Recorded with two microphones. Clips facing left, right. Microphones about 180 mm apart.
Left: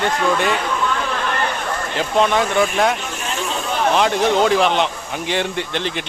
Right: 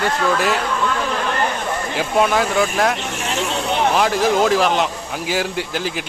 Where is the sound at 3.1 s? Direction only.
80° right.